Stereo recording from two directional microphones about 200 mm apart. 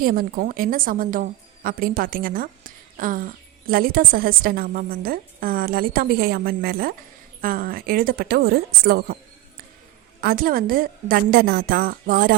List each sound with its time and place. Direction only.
0.0 s a woman's voice: 45° right (ahead or behind)
10.2 s a woman's voice: 45° right (ahead or behind)